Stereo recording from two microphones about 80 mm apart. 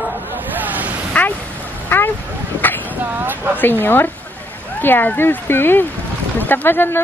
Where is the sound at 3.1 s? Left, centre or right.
Right.